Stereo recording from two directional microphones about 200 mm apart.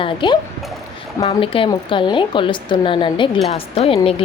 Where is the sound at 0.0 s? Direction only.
25° left (ahead or behind).